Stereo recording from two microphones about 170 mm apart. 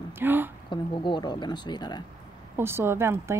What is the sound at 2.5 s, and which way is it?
Speech, 15° right (ahead or behind).